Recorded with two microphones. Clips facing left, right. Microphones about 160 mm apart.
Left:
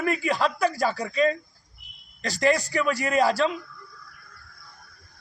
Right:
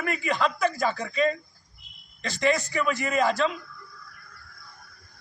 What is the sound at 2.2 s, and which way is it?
A man's voice, 40° left (ahead or behind).